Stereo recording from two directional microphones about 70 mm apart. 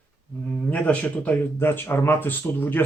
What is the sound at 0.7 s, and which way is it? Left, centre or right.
Speech, left.